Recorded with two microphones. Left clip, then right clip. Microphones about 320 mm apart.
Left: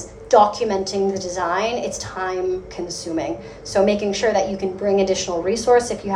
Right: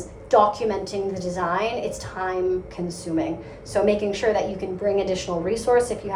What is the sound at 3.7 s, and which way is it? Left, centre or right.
A woman's voice, left.